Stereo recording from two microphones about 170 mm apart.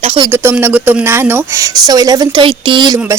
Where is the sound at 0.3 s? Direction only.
10° right (ahead or behind).